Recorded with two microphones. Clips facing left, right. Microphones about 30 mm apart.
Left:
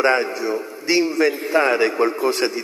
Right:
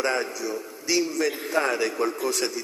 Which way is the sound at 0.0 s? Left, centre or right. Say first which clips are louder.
Left 8 dB; left.